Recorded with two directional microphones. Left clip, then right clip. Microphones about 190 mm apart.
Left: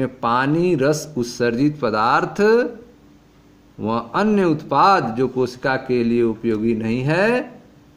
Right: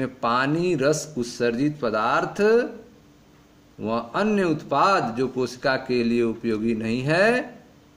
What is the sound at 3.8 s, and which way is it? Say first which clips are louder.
Speech: left 4 dB; 25° left (ahead or behind).